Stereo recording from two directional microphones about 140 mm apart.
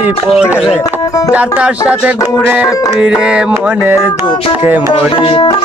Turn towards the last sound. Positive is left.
turn(degrees=40)  # may be behind; listen again after turning